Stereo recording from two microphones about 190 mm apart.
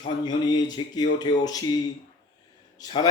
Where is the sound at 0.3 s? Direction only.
20° left (ahead or behind).